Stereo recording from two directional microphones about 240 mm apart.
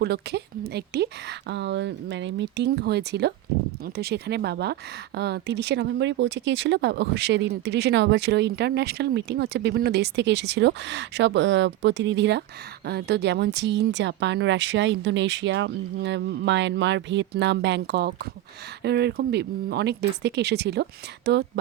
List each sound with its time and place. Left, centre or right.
0.0 s speech: right